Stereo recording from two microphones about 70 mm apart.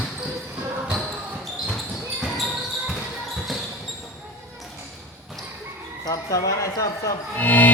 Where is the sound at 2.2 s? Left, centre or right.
Centre.